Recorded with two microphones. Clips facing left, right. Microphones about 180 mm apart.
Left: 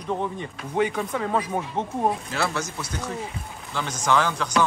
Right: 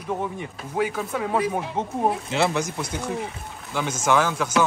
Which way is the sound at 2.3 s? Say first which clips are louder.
Right 4 dB; 20° right (ahead or behind).